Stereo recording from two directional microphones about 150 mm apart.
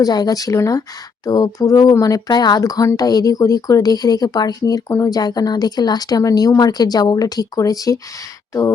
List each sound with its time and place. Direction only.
0.0 s speech: 25° left (ahead or behind)